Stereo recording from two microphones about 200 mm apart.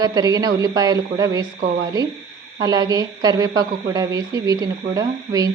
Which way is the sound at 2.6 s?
20° right (ahead or behind).